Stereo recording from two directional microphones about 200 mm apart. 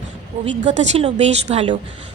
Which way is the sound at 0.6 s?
35° right (ahead or behind).